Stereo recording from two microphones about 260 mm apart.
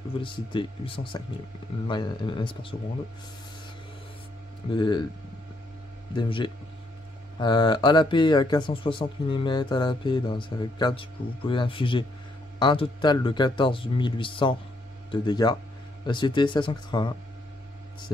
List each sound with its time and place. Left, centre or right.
0.2 s a man's voice: centre
4.6 s speech: centre
6.1 s a man's voice: centre